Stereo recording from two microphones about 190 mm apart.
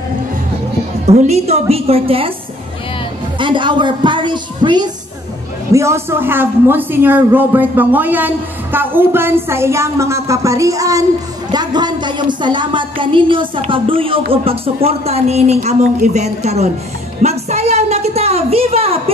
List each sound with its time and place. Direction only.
1.0 s speech: 35° right (ahead or behind)
3.3 s a woman's voice: 25° right (ahead or behind)
17.2 s a sound: 35° right (ahead or behind)